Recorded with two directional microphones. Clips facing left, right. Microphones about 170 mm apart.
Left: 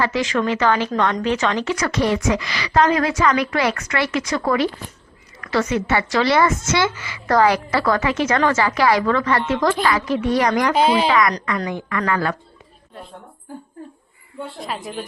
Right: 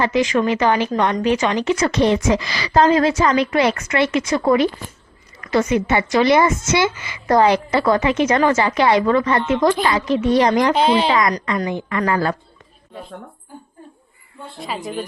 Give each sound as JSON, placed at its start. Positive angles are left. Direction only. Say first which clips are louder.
{"t": 0.0, "sound": "speech", "louder": "right 3 dB", "side_deg": -15}
{"t": 10.8, "sound": "a woman's voice", "louder": "right 1 dB", "side_deg": 5}
{"t": 11.1, "sound": "speech", "louder": "even", "side_deg": -25}
{"t": 14.6, "sound": "a woman's voice", "louder": "right 4 dB", "side_deg": 0}